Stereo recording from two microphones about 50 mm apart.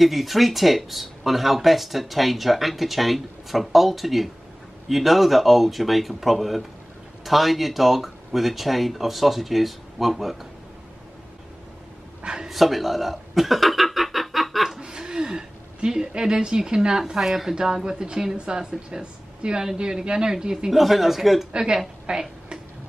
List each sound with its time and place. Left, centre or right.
0.0 s speech: centre
12.2 s speech: centre
12.4 s chuckle: centre
14.8 s speech: centre
20.7 s speech: centre
21.5 s a woman's voice: centre